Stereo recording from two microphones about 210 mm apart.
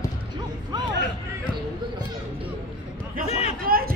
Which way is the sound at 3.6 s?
45° right (ahead or behind).